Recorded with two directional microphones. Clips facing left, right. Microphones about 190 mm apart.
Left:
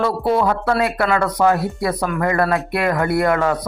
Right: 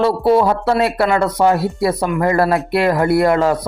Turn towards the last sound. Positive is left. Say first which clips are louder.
# right 4 dB
turn(degrees=-30)  # may be behind; listen again after turning